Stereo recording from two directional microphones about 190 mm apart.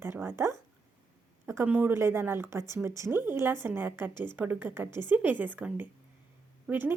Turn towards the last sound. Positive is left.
turn(degrees=-10)  # may be behind; listen again after turning